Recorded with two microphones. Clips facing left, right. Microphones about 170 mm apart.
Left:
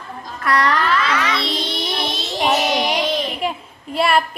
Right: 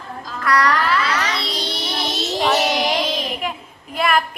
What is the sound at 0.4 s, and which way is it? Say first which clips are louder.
Music: even; 25° left (ahead or behind).